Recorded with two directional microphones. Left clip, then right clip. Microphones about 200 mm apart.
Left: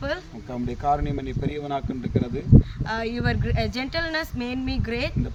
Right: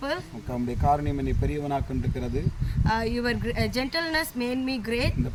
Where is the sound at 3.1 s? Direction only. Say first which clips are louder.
Left 1 dB; 10° left (ahead or behind).